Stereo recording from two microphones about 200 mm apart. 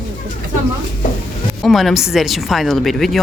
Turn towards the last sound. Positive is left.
turn(degrees=0)  # may be behind; listen again after turning